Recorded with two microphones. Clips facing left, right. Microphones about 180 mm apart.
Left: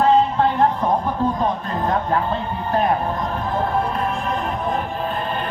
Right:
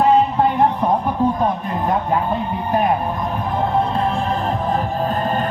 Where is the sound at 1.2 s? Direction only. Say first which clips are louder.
Right 6 dB; 15° right (ahead or behind).